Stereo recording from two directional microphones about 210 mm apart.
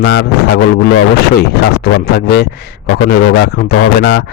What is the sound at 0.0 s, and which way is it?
A man's voice, 55° left (ahead or behind).